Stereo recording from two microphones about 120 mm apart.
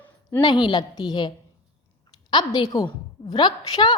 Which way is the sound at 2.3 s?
35° left (ahead or behind).